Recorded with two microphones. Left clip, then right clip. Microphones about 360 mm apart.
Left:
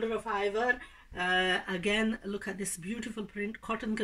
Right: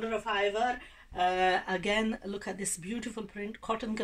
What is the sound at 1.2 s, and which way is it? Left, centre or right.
Speech, centre.